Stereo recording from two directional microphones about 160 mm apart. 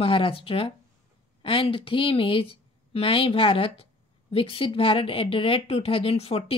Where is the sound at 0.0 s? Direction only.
35° left (ahead or behind).